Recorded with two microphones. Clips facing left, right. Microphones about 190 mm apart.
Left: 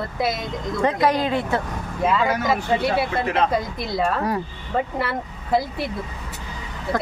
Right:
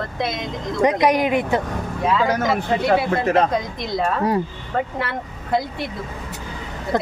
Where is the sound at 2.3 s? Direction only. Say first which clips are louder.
Right 1 dB; 50° right (ahead or behind).